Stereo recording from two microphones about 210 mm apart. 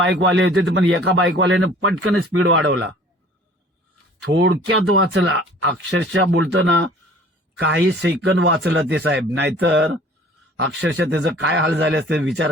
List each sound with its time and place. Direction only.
0.0 s a man's voice: 65° right (ahead or behind)
4.3 s speech: 60° right (ahead or behind)
7.9 s speech: 60° right (ahead or behind)